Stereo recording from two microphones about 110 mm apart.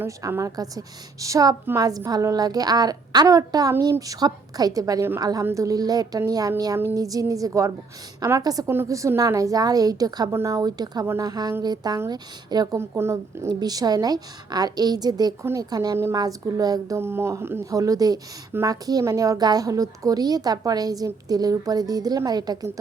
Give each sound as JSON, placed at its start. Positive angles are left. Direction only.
{"t": 0.2, "sound": "a woman's voice", "side_deg": -25}
{"t": 12.7, "sound": "speech", "side_deg": -25}
{"t": 13.5, "sound": "a woman's voice", "side_deg": -40}
{"t": 17.0, "sound": "a woman's voice", "side_deg": -20}